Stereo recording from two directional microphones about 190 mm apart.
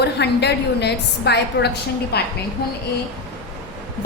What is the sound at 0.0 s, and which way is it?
A woman's voice, 60° left (ahead or behind).